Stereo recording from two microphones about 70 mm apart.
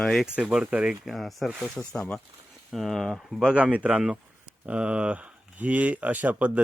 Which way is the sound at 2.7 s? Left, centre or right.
Centre.